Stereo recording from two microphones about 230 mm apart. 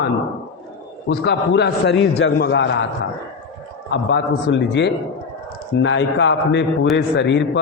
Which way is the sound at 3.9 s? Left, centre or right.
Left.